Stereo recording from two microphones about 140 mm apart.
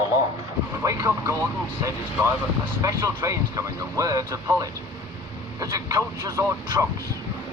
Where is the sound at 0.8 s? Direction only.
20° right (ahead or behind).